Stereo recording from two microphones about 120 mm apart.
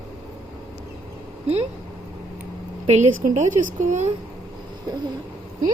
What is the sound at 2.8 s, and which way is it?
Speech, 70° right (ahead or behind).